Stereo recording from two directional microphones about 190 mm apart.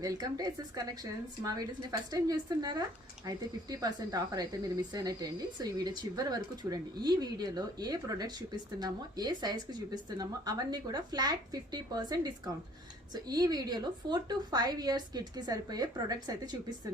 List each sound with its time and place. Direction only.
0.0 s speech: 20° right (ahead or behind)